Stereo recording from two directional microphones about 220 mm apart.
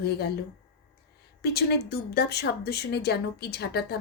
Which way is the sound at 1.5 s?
45° left (ahead or behind).